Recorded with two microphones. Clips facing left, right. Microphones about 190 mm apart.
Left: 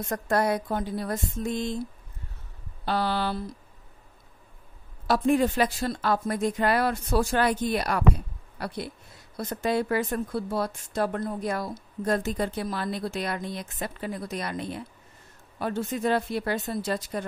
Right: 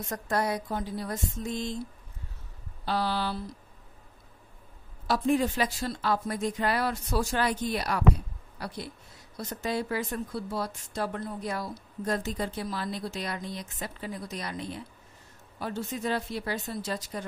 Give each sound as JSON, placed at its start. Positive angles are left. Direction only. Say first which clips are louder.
{"t": 0.1, "sound": "speech", "louder": "left 4 dB", "side_deg": 55}
{"t": 2.8, "sound": "speech", "louder": "left 3 dB", "side_deg": 60}
{"t": 5.0, "sound": "speech", "louder": "left 3 dB", "side_deg": 60}